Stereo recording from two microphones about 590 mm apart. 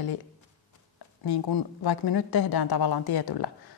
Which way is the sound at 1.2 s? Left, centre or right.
Left.